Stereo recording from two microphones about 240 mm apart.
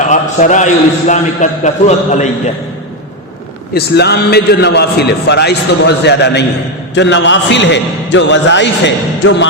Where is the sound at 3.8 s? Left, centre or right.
Left.